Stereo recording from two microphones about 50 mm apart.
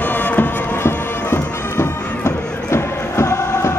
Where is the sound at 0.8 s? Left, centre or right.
Left.